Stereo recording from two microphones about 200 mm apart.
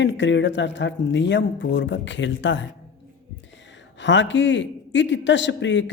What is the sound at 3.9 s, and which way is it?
A man's voice, 65° left (ahead or behind).